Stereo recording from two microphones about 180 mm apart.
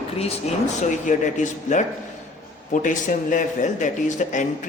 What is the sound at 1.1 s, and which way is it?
Speech, 45° left (ahead or behind).